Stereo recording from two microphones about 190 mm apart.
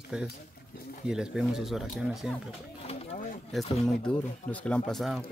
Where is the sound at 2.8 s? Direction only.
30° left (ahead or behind).